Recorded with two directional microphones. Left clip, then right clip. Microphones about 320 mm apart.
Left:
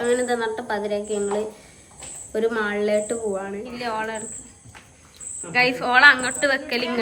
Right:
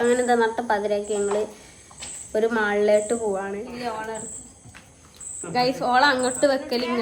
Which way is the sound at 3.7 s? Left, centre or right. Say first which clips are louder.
Left 7 dB; right.